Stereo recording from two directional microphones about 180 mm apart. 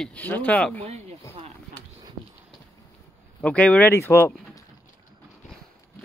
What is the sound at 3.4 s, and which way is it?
Speech, 5° left (ahead or behind).